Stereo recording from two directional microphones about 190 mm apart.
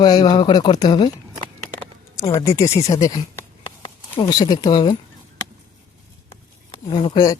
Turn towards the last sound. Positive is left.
turn(degrees=20)  # may be behind; listen again after turning